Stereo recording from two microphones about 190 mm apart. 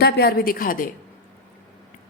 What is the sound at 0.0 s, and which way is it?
Speech, 55° left (ahead or behind).